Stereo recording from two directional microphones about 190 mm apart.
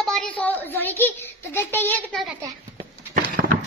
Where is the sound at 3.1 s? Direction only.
50° right (ahead or behind).